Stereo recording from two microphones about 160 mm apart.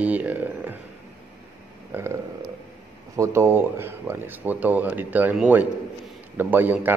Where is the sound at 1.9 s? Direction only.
15° right (ahead or behind).